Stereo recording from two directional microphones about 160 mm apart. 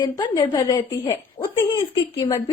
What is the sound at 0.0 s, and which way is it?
A woman's voice, 25° left (ahead or behind).